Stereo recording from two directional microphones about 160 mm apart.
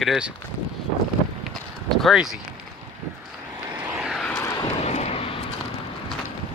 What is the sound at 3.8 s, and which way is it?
Vehicle, 5° right (ahead or behind).